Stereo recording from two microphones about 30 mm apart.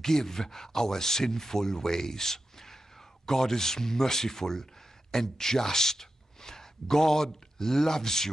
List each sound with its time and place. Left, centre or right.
0.0 s speech: centre